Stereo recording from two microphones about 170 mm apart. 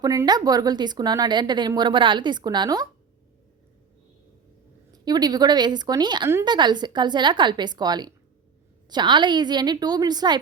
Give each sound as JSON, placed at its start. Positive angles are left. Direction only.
{"t": 0.0, "sound": "speech", "side_deg": -20}
{"t": 4.9, "sound": "speech", "side_deg": -25}